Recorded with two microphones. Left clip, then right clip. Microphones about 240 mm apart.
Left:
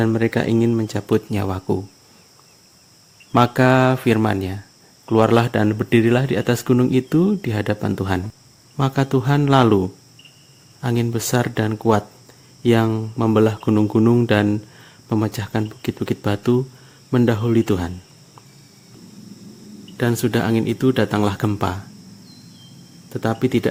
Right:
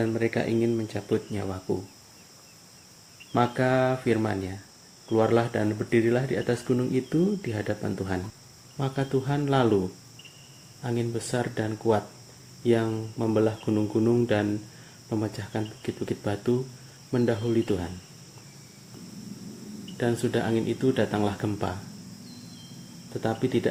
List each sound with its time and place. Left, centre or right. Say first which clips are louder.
0.0 s speech: left 7 dB; left
3.3 s speech: left 8 dB; left
10.8 s speech: left 8 dB; left
20.0 s speech: left 6 dB; left
23.2 s speech: left 6 dB; left